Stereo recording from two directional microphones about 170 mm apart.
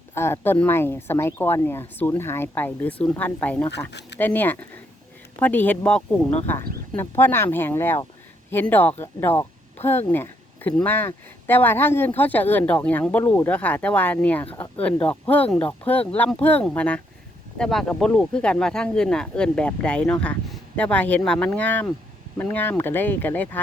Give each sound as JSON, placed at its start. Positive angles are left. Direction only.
{"t": 0.1, "sound": "speech", "side_deg": 15}
{"t": 3.7, "sound": "speech", "side_deg": 90}
{"t": 4.2, "sound": "speech", "side_deg": 10}